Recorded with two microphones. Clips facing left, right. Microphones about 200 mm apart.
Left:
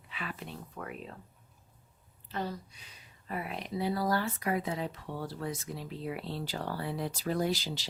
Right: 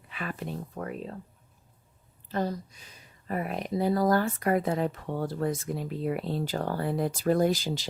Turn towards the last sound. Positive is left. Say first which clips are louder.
# right 6 dB
turn(degrees=-50)  # may be behind; listen again after turning